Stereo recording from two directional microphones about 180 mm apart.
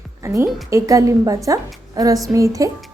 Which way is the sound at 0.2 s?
15° right (ahead or behind).